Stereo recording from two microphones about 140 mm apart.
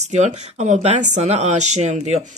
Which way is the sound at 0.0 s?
55° right (ahead or behind).